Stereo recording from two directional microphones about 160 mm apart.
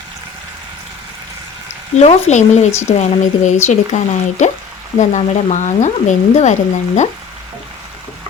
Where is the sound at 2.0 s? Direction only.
45° left (ahead or behind).